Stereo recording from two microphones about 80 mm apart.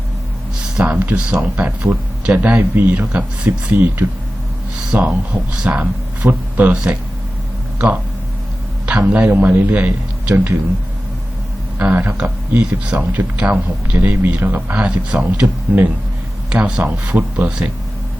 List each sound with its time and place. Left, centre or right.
0.6 s speech: centre
6.2 s speech: right
6.6 s speech: centre
8.9 s a man's voice: centre
11.8 s speech: right